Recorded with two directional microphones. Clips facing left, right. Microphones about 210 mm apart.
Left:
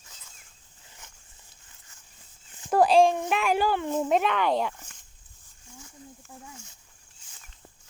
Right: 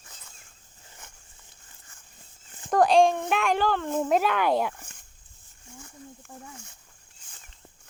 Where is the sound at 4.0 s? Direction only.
Centre (ahead or behind).